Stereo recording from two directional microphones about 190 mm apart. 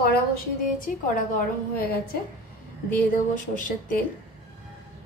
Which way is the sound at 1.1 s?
45° left (ahead or behind).